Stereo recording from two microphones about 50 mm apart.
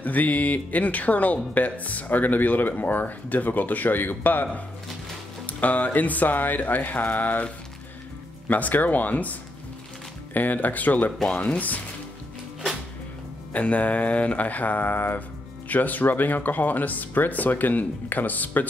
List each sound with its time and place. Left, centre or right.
0.0 s speech: left
8.5 s speech: left
11.2 s mantra: left
13.5 s mantra: left
15.7 s speech: left